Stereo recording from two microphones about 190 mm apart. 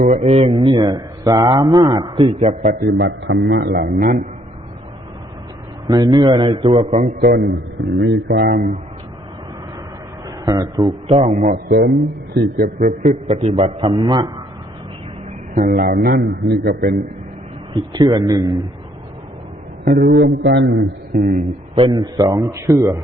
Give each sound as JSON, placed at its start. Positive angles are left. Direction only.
{"t": 0.0, "sound": "speech", "side_deg": -30}
{"t": 2.6, "sound": "a man's voice", "side_deg": -55}
{"t": 5.9, "sound": "speech", "side_deg": -20}
{"t": 7.2, "sound": "a man's voice", "side_deg": -60}
{"t": 10.2, "sound": "speech", "side_deg": -20}
{"t": 11.5, "sound": "a man's voice", "side_deg": -60}
{"t": 13.2, "sound": "speech", "side_deg": -35}
{"t": 15.5, "sound": "a man's voice", "side_deg": -50}
{"t": 17.7, "sound": "speech", "side_deg": -25}
{"t": 19.9, "sound": "a man's voice", "side_deg": -65}
{"t": 21.8, "sound": "speech", "side_deg": -25}